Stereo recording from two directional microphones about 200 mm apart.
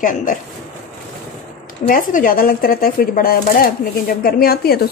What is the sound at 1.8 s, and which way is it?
Speech, 45° left (ahead or behind).